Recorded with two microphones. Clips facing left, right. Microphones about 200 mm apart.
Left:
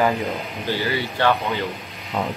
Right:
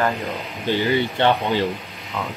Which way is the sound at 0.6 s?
20° right (ahead or behind).